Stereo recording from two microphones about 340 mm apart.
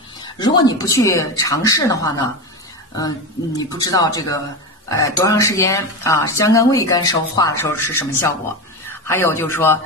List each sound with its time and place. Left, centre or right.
0.2 s speech: centre
3.5 s speech: centre